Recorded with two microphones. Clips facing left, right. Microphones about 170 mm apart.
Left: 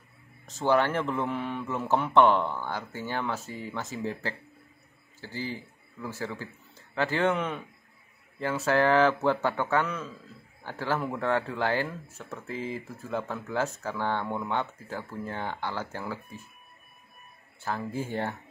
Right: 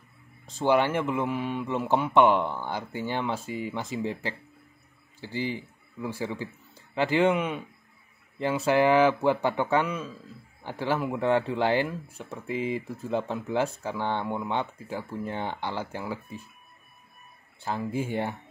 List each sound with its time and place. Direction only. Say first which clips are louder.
0.5 s a man's voice: right 1 dB; 10° right (ahead or behind)
17.6 s speech: right 2 dB; 10° right (ahead or behind)